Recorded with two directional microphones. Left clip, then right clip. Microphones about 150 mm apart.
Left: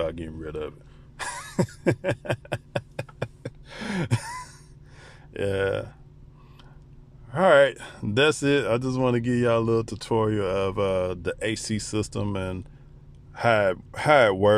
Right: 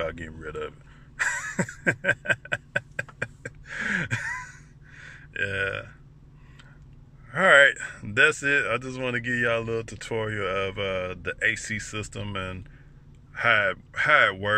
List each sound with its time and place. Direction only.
0.0 s speech: 15° left (ahead or behind)
1.9 s a sound: 20° left (ahead or behind)
5.3 s speech: 35° left (ahead or behind)
7.2 s speech: 20° left (ahead or behind); by 14.5 s 50° left (ahead or behind)